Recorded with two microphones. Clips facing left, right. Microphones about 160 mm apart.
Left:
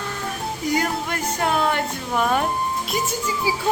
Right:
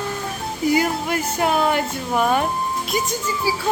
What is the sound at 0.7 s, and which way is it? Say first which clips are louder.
Speech: right 3 dB; 5° right (ahead or behind).